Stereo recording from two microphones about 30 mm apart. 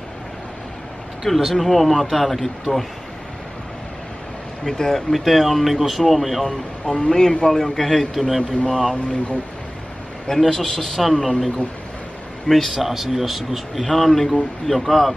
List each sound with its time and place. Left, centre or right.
1.2 s speech: centre
4.6 s speech: centre
5.1 s speech: centre
6.9 s speech: left
8.1 s speech: centre
8.9 s speech: left
10.5 s speech: centre
12.4 s speech: centre
12.7 s speech: centre